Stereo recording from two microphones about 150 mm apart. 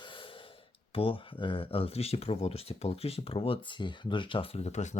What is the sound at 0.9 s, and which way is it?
Speech, 35° left (ahead or behind).